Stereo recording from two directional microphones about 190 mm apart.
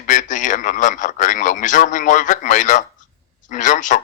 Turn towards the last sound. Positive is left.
turn(degrees=40)  # may be behind; listen again after turning